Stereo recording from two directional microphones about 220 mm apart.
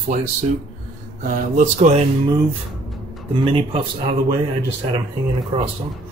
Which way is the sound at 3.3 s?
25° right (ahead or behind).